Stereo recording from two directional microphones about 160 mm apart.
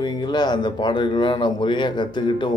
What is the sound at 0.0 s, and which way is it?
Speech, 25° left (ahead or behind).